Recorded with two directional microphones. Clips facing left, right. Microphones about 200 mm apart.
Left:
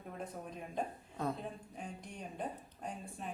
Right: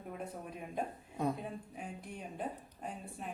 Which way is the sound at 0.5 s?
10° right (ahead or behind).